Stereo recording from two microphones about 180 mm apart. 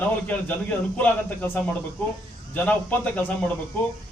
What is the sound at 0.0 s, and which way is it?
A man's voice, 10° left (ahead or behind).